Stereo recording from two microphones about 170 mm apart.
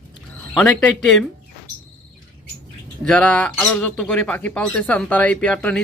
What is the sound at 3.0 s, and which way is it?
Speech, 5° left (ahead or behind).